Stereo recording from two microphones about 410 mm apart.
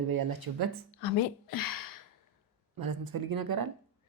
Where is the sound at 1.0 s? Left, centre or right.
Left.